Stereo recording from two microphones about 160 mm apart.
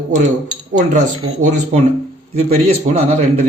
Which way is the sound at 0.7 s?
50° right (ahead or behind).